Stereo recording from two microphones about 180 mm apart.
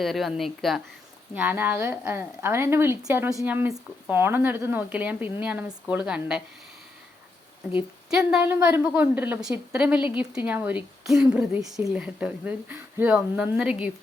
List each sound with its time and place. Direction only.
0.0 s a woman's voice: centre (ahead or behind)
7.8 s a woman's voice: 5° right (ahead or behind)